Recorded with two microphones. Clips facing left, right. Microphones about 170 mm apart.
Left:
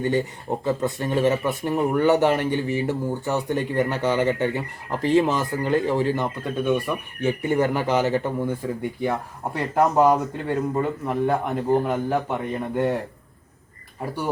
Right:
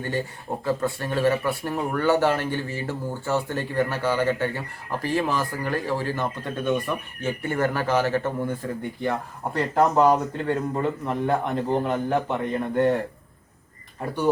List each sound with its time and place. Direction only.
0.0 s speech: 20° left (ahead or behind)